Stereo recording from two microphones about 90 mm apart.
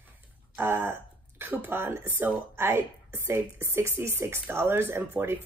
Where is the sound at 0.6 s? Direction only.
25° right (ahead or behind).